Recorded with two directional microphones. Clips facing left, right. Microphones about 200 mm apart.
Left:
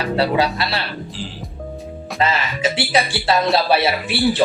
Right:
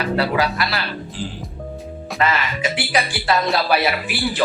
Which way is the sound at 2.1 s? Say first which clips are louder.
Even; 25° left (ahead or behind).